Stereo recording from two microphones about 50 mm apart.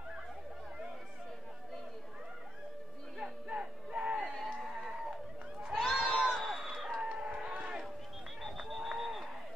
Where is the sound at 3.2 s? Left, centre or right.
Centre.